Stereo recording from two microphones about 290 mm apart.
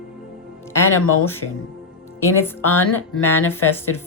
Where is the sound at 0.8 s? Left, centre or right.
Left.